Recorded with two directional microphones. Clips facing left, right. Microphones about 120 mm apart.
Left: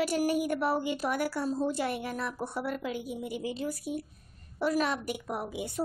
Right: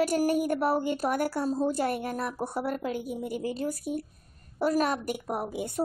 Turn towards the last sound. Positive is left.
turn(degrees=-45)  # may be behind; listen again after turning